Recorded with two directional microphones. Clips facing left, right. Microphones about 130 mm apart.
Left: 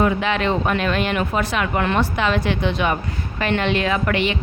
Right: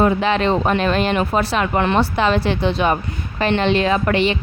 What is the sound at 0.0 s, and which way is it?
Speech, 35° right (ahead or behind).